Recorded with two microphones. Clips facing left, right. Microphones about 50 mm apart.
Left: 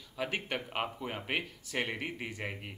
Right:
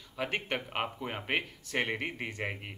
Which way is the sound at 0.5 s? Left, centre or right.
Centre.